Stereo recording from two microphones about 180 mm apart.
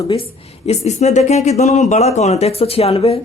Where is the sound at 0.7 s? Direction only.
40° left (ahead or behind).